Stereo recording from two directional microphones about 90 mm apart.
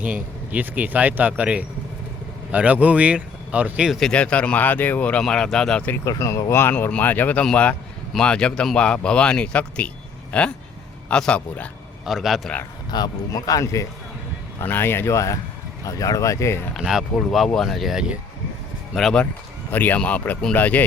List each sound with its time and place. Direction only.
0.0 s speech: 20° right (ahead or behind)
3.9 s speech: 10° left (ahead or behind)
5.2 s speech: 5° left (ahead or behind)
6.1 s speech: 35° left (ahead or behind); by 11.7 s 15° left (ahead or behind)
12.0 s speech: centre (ahead or behind)
12.9 s speech: 50° left (ahead or behind)
14.6 s speech: 25° left (ahead or behind)
16.7 s speech: 5° right (ahead or behind)
18.9 s speech: 5° left (ahead or behind)
19.7 s speech: 20° left (ahead or behind)